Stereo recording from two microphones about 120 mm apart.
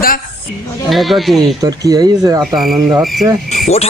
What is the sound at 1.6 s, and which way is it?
Speech, 30° right (ahead or behind).